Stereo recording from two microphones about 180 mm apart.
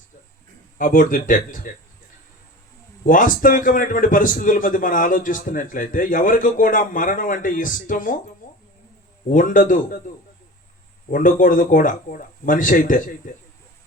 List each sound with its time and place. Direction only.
0.8 s a man's voice: 50° left (ahead or behind)
3.0 s a man's voice: 50° left (ahead or behind)
9.3 s a man's voice: 50° left (ahead or behind)
11.1 s a man's voice: 50° left (ahead or behind)